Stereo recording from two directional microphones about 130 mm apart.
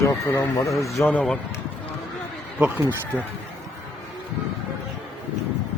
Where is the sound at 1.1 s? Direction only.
10° left (ahead or behind).